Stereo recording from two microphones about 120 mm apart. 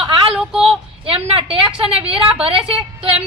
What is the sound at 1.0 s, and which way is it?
Speech, 50° right (ahead or behind).